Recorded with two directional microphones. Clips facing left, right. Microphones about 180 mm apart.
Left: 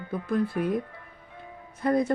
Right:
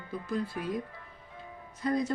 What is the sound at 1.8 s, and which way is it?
Speech, 60° left (ahead or behind).